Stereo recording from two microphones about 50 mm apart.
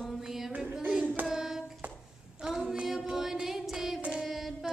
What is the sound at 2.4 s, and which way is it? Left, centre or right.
Female singing, centre.